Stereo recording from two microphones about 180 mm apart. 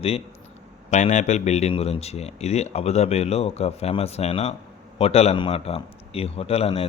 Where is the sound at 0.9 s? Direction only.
40° left (ahead or behind).